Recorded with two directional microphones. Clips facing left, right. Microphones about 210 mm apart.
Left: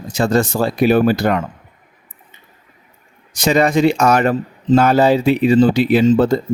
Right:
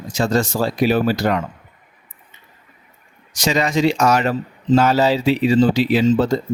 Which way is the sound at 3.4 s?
55° left (ahead or behind).